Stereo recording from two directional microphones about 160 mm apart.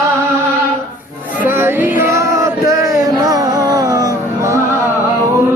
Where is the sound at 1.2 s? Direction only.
10° right (ahead or behind).